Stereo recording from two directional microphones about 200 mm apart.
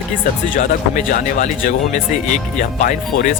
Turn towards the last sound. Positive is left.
turn(degrees=40)  # may be behind; listen again after turning